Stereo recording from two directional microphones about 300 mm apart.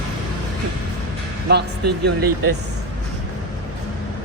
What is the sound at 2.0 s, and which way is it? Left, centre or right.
Speech, right.